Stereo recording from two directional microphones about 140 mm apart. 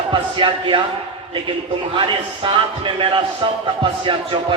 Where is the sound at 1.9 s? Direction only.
35° right (ahead or behind).